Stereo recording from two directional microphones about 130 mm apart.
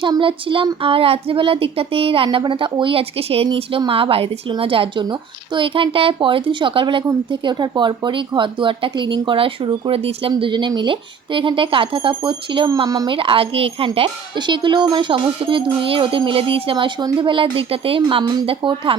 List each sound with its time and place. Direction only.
0.0 s speech: 40° right (ahead or behind)